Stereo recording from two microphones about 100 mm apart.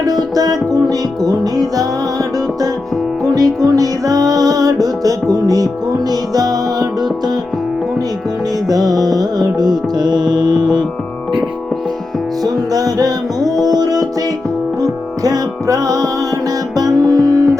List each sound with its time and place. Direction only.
0.0 s music: 40° right (ahead or behind)
8.6 s music: 40° right (ahead or behind)
12.4 s music: 40° right (ahead or behind)